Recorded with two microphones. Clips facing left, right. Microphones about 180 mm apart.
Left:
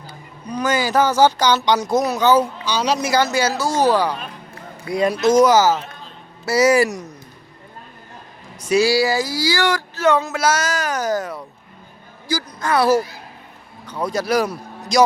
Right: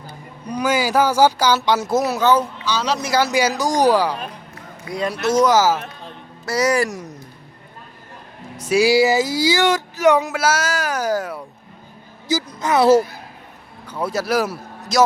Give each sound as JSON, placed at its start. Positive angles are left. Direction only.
{"t": 0.5, "sound": "speech", "side_deg": -10}
{"t": 2.3, "sound": "speech", "side_deg": 15}
{"t": 3.1, "sound": "speech", "side_deg": -10}
{"t": 4.9, "sound": "speech", "side_deg": 15}
{"t": 5.5, "sound": "speech", "side_deg": -5}
{"t": 6.4, "sound": "speech", "side_deg": 5}
{"t": 8.5, "sound": "speech", "side_deg": -5}
{"t": 8.8, "sound": "speech", "side_deg": -20}
{"t": 12.5, "sound": "a child's voice", "side_deg": -20}
{"t": 13.8, "sound": "a man's voice", "side_deg": -5}